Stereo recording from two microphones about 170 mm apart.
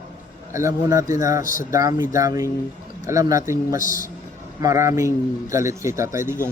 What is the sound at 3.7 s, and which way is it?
Speech, 50° left (ahead or behind).